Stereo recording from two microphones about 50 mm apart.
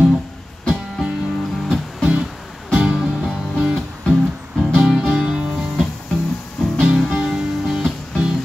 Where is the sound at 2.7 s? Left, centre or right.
Centre.